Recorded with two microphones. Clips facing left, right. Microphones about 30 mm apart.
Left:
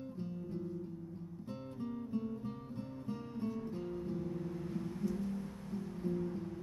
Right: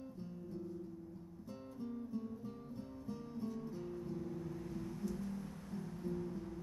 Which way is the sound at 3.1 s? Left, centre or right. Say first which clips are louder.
Left 3 dB; left.